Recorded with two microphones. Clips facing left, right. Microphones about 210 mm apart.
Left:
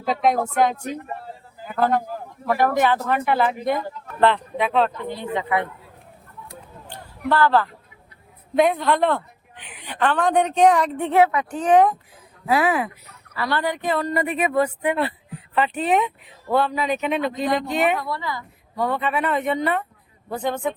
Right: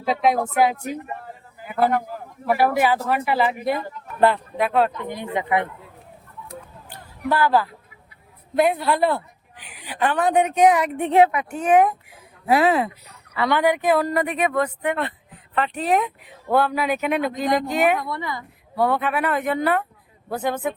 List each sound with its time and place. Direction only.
0.0 s a man's voice: 5° right (ahead or behind); by 5.6 s 20° right (ahead or behind)
7.3 s a woman's voice: 10° right (ahead or behind)
12.5 s a woman's voice: 25° right (ahead or behind)
14.0 s speech: centre (ahead or behind)
18.1 s speech: 20° right (ahead or behind)
18.8 s a woman's voice: 10° right (ahead or behind)